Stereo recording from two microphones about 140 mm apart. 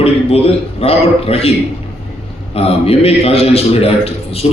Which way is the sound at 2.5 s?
45° left (ahead or behind).